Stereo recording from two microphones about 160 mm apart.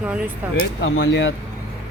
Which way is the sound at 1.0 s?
90° left.